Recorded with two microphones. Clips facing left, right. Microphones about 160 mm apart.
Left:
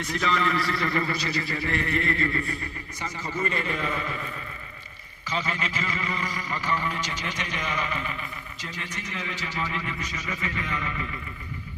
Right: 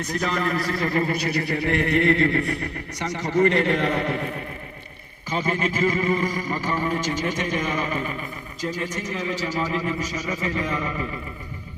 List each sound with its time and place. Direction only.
0.0 s speech: 40° right (ahead or behind); by 4.4 s 60° right (ahead or behind)
5.3 s speech: 50° right (ahead or behind)